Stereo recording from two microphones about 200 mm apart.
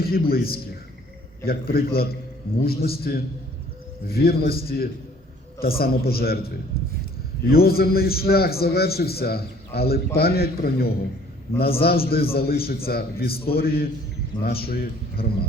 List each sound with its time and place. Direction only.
0.0 s a man's voice: 50° left (ahead or behind)
7.5 s a man's voice: 50° left (ahead or behind)